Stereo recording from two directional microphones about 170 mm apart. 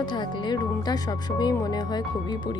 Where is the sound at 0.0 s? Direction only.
25° left (ahead or behind).